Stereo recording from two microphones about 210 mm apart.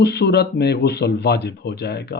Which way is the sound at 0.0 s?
55° left (ahead or behind).